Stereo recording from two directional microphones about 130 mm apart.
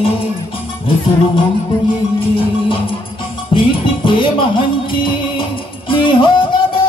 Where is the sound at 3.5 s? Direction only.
40° left (ahead or behind).